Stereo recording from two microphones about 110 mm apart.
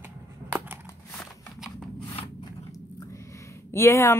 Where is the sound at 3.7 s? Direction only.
25° left (ahead or behind).